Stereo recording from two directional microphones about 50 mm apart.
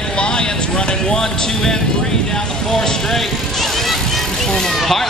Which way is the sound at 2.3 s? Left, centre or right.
Centre.